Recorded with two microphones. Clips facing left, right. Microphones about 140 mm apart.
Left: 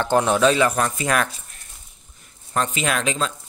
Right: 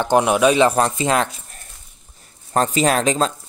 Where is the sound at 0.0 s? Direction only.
15° right (ahead or behind).